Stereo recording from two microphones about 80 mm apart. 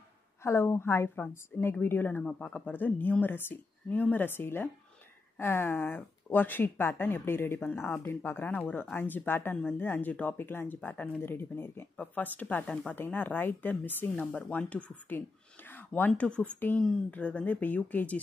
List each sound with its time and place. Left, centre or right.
0.4 s a woman's voice: left; by 12.9 s centre
12.9 s a woman's voice: left
15.7 s a sound: left
16.1 s speech: centre
16.5 s a woman's voice: left